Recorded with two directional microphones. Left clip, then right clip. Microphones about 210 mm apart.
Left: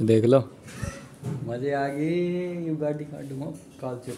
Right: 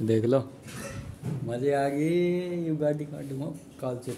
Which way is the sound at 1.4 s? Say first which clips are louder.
Right 1 dB; 10° right (ahead or behind).